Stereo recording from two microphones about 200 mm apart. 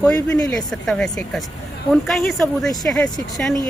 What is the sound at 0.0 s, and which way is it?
Speech, 5° left (ahead or behind).